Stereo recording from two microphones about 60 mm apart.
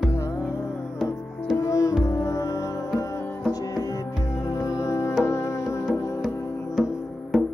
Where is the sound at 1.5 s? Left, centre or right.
Left.